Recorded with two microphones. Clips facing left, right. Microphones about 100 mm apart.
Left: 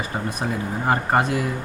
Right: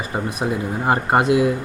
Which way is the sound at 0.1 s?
5° right (ahead or behind).